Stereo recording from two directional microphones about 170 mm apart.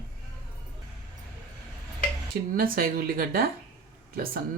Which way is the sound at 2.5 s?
60° right (ahead or behind).